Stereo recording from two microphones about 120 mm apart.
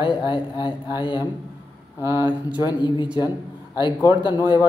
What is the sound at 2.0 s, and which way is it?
Speech, 20° right (ahead or behind).